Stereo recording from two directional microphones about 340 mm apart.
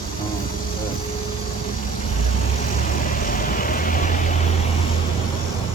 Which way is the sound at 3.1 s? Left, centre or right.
Left.